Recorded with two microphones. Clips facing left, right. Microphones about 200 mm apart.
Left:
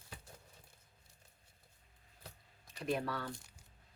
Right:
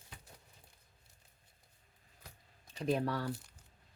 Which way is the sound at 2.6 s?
35° right (ahead or behind).